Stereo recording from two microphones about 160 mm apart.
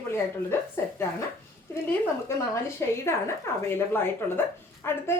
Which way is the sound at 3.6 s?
15° left (ahead or behind).